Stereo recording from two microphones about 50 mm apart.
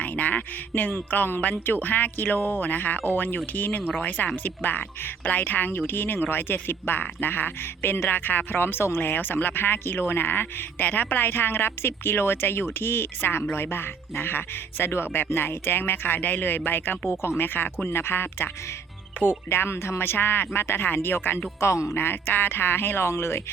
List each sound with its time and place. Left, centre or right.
0.0 s speech: left
3.0 s speech: left
17.8 s speech: left